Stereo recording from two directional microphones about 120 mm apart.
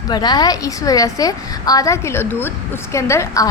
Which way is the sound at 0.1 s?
35° left (ahead or behind).